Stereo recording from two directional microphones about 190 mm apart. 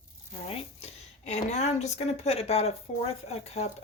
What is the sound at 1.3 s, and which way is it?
Speech, 35° left (ahead or behind).